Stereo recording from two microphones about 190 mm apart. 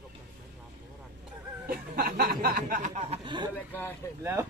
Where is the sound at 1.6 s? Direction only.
50° right (ahead or behind); by 3.5 s 25° right (ahead or behind).